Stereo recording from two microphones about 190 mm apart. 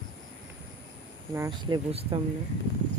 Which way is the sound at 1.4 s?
20° right (ahead or behind).